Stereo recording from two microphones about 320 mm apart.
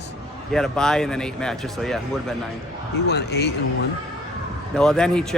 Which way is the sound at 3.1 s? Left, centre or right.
Left.